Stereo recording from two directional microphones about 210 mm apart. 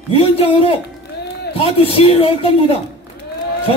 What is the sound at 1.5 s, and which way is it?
A man's voice, 25° left (ahead or behind).